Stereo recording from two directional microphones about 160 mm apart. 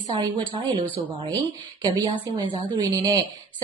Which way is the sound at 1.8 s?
30° right (ahead or behind).